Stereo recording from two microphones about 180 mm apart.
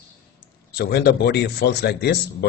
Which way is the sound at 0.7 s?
60° left (ahead or behind).